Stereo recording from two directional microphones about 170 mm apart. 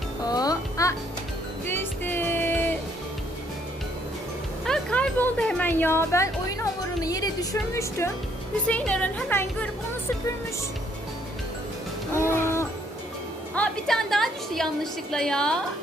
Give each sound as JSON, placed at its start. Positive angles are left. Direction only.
{"t": 0.3, "sound": "music", "side_deg": 20}
{"t": 4.6, "sound": "music", "side_deg": 5}
{"t": 8.6, "sound": "speech", "side_deg": 5}
{"t": 12.1, "sound": "music", "side_deg": 15}
{"t": 13.6, "sound": "a woman's voice", "side_deg": 0}